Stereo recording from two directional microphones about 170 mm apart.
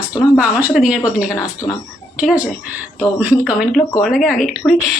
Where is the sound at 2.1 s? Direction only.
5° right (ahead or behind).